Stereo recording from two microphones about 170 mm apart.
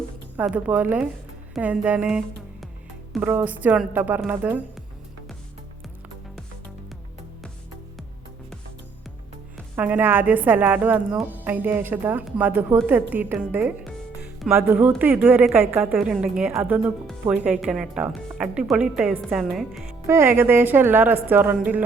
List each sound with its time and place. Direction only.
0.3 s speech: 5° right (ahead or behind)
9.7 s speech: 10° right (ahead or behind)
20.1 s speech: 15° right (ahead or behind)